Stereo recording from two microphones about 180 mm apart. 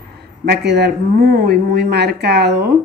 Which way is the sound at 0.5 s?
65° right (ahead or behind).